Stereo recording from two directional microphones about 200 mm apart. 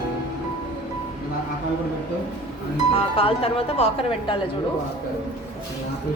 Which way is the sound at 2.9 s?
30° left (ahead or behind).